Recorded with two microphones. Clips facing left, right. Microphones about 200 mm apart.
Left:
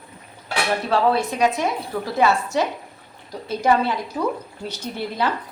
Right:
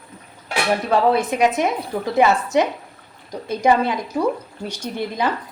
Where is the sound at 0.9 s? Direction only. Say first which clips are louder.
Right 2 dB; 20° right (ahead or behind).